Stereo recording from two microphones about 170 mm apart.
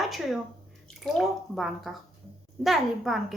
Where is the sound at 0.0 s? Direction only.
Centre (ahead or behind).